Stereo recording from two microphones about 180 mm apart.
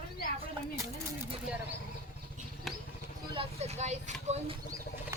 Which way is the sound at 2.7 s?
Centre (ahead or behind).